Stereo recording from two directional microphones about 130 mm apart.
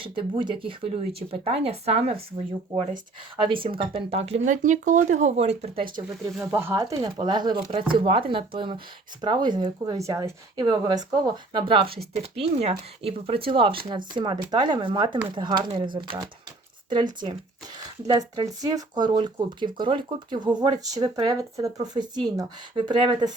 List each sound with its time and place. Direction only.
0.0 s speech: 40° right (ahead or behind); by 2.1 s 55° right (ahead or behind)
3.3 s speech: 40° right (ahead or behind)
4.4 s speech: 75° right (ahead or behind); by 5.8 s 55° right (ahead or behind)
6.5 s speech: 20° right (ahead or behind)
6.9 s speech: 35° right (ahead or behind)